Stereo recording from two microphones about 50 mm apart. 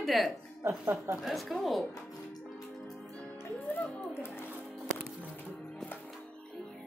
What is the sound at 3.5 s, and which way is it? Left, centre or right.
Music, left.